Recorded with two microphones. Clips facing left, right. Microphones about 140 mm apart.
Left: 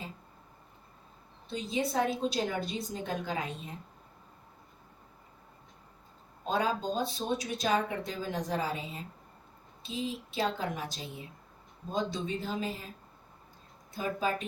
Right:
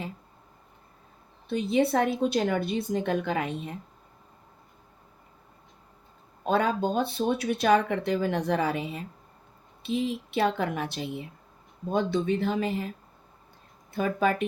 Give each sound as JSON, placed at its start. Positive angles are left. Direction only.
{"t": 1.5, "sound": "speech", "side_deg": -60}
{"t": 6.4, "sound": "speech", "side_deg": -60}
{"t": 13.9, "sound": "speech", "side_deg": -65}